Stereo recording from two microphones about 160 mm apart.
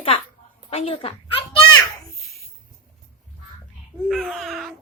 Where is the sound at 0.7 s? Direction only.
35° left (ahead or behind).